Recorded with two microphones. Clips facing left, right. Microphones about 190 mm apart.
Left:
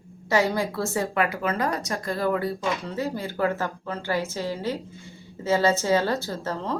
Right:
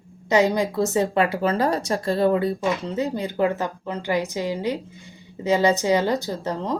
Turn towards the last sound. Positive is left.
turn(degrees=-15)  # may be behind; listen again after turning